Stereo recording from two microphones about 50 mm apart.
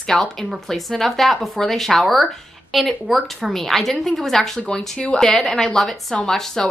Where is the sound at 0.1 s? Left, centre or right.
Centre.